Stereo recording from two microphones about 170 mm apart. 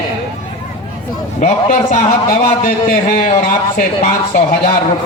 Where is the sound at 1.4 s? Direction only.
45° left (ahead or behind).